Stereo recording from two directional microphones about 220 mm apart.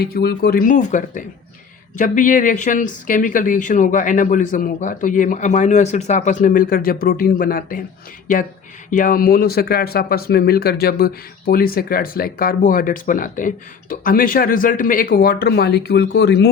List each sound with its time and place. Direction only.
0.0 s speech: 45° left (ahead or behind)
8.9 s speech: 40° left (ahead or behind)